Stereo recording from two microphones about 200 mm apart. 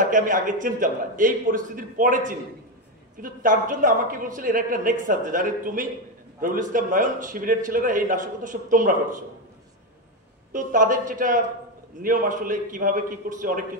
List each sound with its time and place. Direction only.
0.0 s a man's voice: 40° right (ahead or behind)
10.5 s a man's voice: 40° right (ahead or behind)